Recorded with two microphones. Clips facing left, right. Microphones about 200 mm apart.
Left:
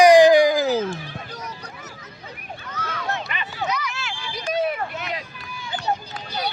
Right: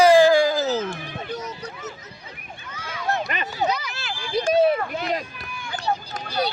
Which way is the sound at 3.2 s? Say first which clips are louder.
Right 4 dB; 40° right (ahead or behind).